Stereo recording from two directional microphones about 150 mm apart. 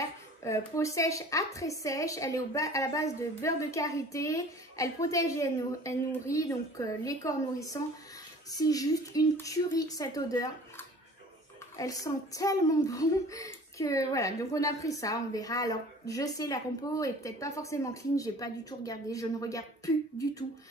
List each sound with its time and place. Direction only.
0.0 s a woman's voice: 20° left (ahead or behind)
11.8 s a woman's voice: 25° left (ahead or behind)